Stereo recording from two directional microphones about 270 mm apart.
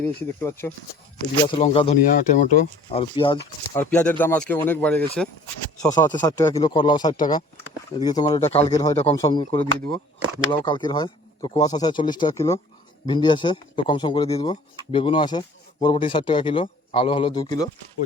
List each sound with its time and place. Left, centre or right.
0.0 s speech: centre
1.5 s speech: left
3.8 s speech: centre